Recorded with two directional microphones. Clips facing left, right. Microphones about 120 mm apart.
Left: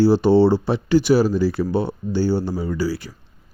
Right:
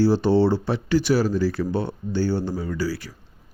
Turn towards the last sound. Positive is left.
turn(degrees=15)  # may be behind; listen again after turning